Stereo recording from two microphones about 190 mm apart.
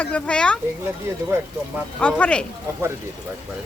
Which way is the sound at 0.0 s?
5° left (ahead or behind).